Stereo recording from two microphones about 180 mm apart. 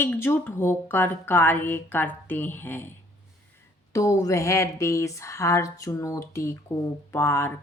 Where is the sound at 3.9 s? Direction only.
20° left (ahead or behind).